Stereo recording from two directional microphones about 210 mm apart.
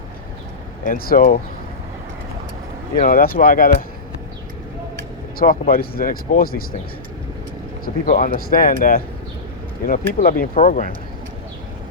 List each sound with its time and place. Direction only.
0.9 s speech: 45° left (ahead or behind)
3.0 s speech: 45° left (ahead or behind)
5.4 s speech: 45° left (ahead or behind)
8.0 s speech: 35° left (ahead or behind)